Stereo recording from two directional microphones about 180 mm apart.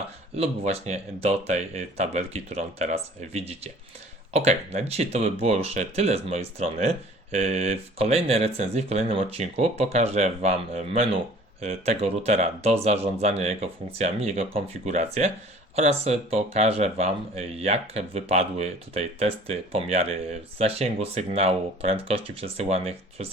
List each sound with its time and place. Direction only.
0.3 s speech: 35° right (ahead or behind)